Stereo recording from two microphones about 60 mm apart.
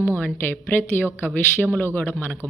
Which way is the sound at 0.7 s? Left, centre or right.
Left.